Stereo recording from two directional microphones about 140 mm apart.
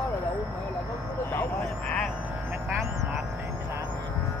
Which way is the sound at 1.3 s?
15° left (ahead or behind).